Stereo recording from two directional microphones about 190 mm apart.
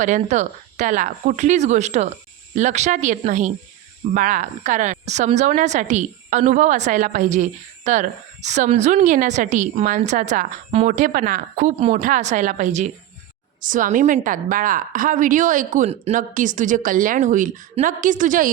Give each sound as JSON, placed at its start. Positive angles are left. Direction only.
{"t": 0.0, "sound": "a woman's voice", "side_deg": -40}